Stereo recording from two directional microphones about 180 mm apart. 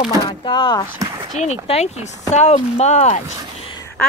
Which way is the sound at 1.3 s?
40° left (ahead or behind).